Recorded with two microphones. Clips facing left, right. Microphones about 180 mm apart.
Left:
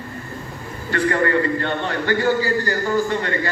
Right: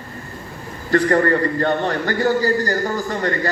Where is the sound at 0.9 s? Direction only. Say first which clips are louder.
Right 3 dB; 40° right (ahead or behind).